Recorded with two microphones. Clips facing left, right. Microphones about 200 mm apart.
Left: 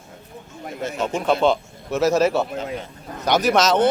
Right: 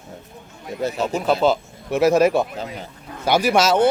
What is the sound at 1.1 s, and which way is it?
A man's voice, 5° right (ahead or behind).